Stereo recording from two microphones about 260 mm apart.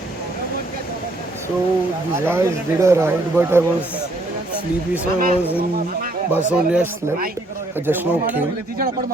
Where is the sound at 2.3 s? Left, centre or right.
Centre.